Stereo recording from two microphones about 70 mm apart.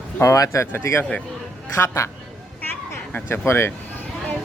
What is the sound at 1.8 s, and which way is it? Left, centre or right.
Child singing, left.